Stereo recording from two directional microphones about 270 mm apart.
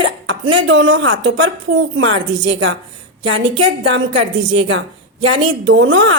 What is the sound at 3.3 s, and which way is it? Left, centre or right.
A woman's voice, right.